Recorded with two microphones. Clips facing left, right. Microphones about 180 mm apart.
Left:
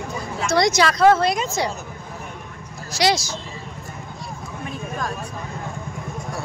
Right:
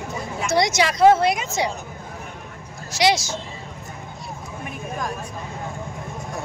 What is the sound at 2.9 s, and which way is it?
Speech, 20° right (ahead or behind).